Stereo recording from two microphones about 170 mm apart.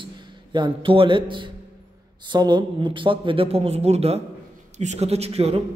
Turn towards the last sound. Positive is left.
turn(degrees=-35)  # may be behind; listen again after turning